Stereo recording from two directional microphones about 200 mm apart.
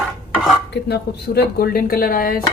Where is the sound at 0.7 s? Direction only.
55° left (ahead or behind).